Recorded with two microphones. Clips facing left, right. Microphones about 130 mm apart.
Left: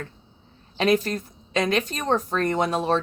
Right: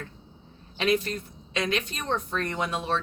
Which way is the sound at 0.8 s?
40° left (ahead or behind).